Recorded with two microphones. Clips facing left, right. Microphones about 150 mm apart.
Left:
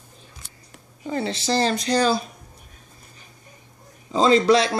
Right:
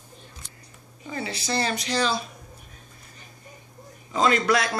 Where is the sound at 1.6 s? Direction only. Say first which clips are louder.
Left 5 dB; 40° left (ahead or behind).